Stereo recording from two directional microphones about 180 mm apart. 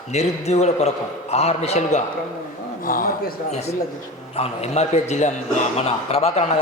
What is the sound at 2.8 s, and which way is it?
Speech, 50° left (ahead or behind).